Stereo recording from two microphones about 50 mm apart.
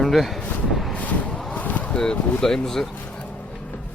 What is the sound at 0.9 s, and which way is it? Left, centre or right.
Vehicle, left.